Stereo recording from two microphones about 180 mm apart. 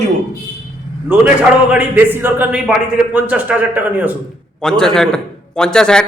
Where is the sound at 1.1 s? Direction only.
10° right (ahead or behind).